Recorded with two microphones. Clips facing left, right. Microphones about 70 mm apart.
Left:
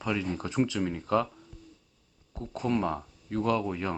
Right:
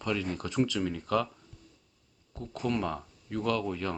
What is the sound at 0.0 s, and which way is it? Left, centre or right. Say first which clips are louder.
Speech: left 1 dB; centre.